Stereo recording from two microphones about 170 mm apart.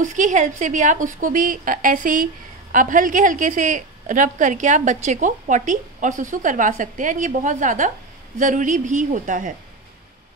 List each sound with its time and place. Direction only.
0.0 s a woman's voice: 45° right (ahead or behind)